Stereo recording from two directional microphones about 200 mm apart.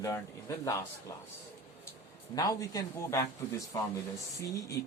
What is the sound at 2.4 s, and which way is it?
A man's voice, 15° left (ahead or behind).